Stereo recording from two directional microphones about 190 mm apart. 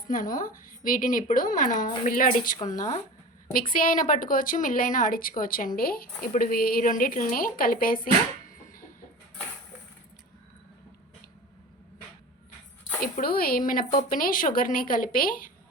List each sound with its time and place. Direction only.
0.1 s speech: 45° left (ahead or behind)
13.0 s speech: 50° left (ahead or behind)